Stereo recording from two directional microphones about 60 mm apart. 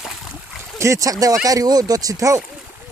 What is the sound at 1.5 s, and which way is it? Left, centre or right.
Speech, right.